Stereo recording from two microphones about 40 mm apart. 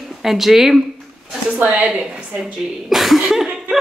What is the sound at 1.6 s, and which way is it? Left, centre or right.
Speech, right.